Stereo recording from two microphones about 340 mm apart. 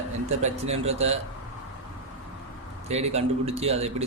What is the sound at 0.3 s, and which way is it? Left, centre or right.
Speech, centre.